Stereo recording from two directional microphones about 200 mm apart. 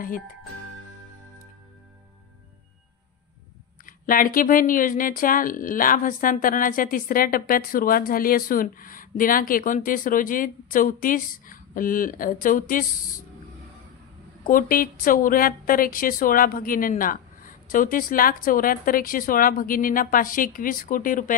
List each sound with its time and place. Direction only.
3.8 s speech: 45° left (ahead or behind)
14.4 s speech: 45° left (ahead or behind)